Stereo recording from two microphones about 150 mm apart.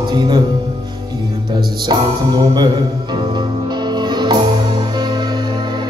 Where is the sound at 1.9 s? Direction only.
30° right (ahead or behind).